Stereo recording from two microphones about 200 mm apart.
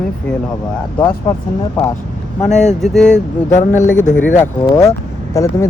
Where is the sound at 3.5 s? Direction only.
40° left (ahead or behind).